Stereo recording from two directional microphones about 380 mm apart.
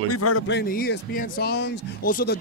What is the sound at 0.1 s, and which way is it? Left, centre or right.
Speech, left.